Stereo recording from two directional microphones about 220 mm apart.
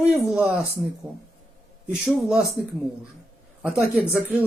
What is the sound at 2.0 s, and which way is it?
Speech, 5° right (ahead or behind).